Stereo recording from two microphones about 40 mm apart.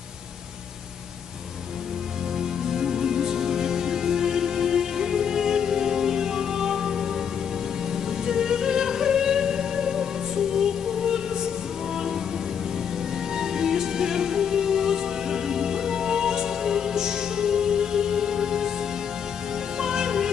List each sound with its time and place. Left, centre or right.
2.7 s music: centre
8.3 s music: centre
13.4 s music: centre
19.8 s music: centre